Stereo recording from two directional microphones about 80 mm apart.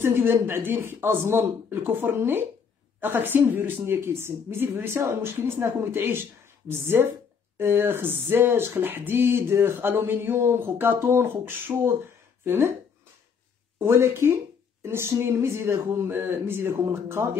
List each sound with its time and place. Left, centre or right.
0.0 s speech: right
13.7 s a woman's voice: right